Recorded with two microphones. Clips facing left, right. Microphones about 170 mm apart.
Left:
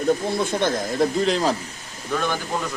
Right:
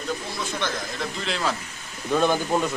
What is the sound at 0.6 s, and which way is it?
Speech, 40° left (ahead or behind).